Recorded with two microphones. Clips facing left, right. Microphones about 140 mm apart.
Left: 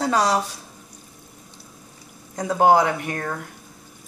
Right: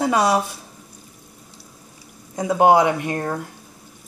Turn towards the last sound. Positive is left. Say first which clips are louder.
# right 4 dB
turn(degrees=-20)  # may be behind; listen again after turning